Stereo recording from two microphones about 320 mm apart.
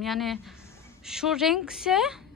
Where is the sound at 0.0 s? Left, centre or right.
Centre.